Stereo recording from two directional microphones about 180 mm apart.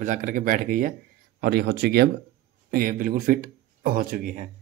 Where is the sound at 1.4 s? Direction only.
65° right (ahead or behind).